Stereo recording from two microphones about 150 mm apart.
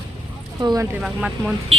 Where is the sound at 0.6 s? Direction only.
25° right (ahead or behind).